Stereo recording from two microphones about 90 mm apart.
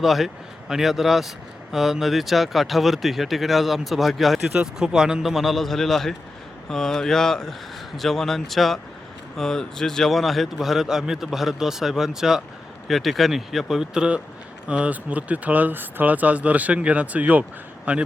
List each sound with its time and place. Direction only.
0.0 s speech: centre (ahead or behind); by 17.4 s 15° right (ahead or behind)